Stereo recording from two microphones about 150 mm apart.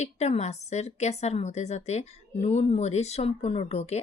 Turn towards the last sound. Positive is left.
turn(degrees=45)  # may be behind; listen again after turning